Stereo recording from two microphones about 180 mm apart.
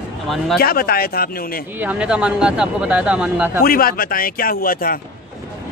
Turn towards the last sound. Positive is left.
turn(degrees=55)  # may be behind; listen again after turning